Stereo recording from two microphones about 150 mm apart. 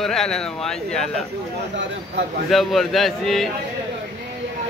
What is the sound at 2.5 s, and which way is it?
Speech, centre (ahead or behind).